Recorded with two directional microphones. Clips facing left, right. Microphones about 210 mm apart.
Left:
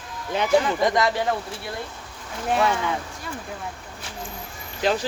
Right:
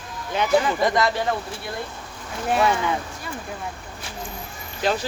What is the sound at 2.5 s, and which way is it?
Speech, 5° right (ahead or behind).